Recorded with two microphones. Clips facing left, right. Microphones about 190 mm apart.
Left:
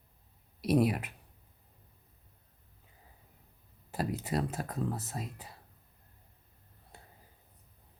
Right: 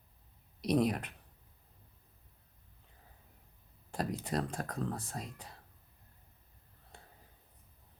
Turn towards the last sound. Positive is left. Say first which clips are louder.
# left 1 dB
turn(degrees=5)  # may be behind; listen again after turning